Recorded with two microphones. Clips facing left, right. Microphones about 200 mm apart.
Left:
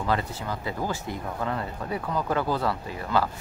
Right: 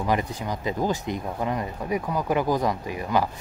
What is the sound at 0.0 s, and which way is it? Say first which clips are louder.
Speech: right 2 dB; 15° right (ahead or behind).